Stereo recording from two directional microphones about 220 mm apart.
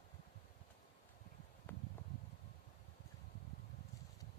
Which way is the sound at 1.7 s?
10° left (ahead or behind).